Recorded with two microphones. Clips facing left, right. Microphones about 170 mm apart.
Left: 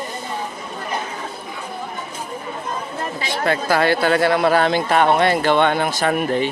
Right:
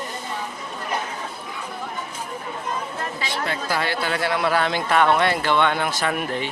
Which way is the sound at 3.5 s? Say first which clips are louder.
Left 10 dB; 60° left (ahead or behind).